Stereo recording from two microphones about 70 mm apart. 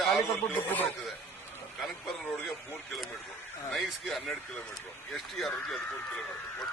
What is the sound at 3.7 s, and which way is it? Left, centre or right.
Speech, centre.